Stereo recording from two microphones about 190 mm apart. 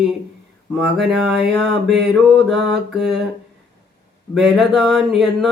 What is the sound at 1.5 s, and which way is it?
Mantra, 65° right (ahead or behind).